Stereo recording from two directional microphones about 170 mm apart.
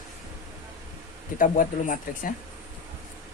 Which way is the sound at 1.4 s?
50° left (ahead or behind).